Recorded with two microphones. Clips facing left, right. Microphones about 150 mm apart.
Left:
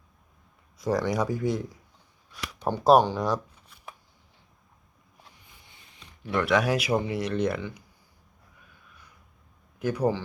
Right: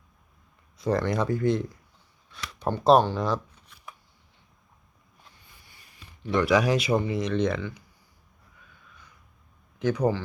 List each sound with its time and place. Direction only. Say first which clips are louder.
0.9 s speech: right 1 dB; 10° left (ahead or behind)
5.6 s a sound: left 1 dB; 20° left (ahead or behind)
6.2 s speech: right 2 dB; centre (ahead or behind)
9.7 s speech: right 1 dB; 10° left (ahead or behind)